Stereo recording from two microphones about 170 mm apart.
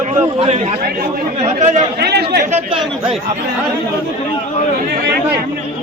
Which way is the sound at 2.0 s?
75° right (ahead or behind).